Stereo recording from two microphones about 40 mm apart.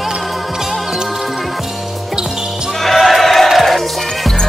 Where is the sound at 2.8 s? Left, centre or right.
Centre.